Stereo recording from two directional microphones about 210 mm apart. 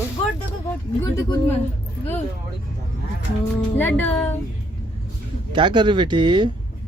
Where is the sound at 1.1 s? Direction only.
15° left (ahead or behind).